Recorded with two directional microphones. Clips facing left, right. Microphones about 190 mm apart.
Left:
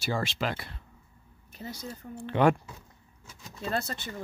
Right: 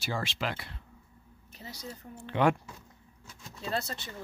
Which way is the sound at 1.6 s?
50° left (ahead or behind).